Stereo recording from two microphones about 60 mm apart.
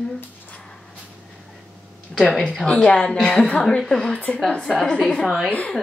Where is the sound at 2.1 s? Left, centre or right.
Centre.